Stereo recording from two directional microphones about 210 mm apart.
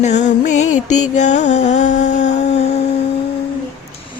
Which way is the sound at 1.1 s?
35° left (ahead or behind).